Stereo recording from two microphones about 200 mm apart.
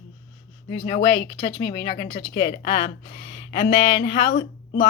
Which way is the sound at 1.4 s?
55° left (ahead or behind).